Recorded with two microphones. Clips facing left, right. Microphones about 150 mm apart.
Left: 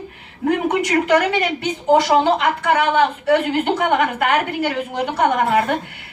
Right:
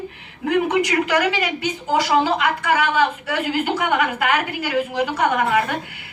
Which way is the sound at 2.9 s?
55° left (ahead or behind).